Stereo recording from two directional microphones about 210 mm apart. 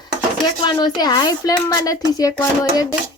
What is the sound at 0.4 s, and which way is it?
Speech, 20° left (ahead or behind).